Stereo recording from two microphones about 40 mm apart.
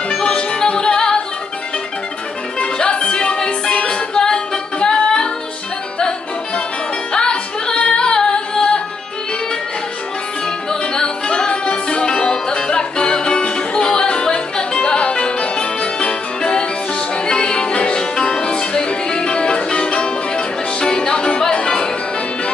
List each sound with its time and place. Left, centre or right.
0.1 s music: left
2.6 s music: left
10.4 s music: centre